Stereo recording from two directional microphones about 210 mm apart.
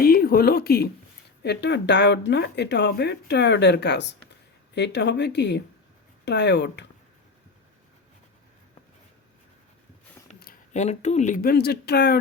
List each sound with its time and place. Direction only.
0.0 s speech: 45° left (ahead or behind)
10.4 s speech: 35° left (ahead or behind)